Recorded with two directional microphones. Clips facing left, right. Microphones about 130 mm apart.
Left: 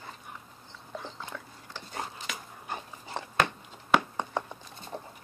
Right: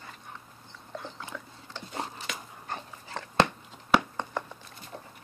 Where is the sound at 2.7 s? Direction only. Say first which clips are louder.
Left 1 dB; 15° left (ahead or behind).